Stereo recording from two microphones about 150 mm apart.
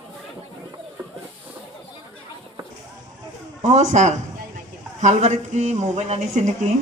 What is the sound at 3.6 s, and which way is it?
A man's voice, 55° right (ahead or behind).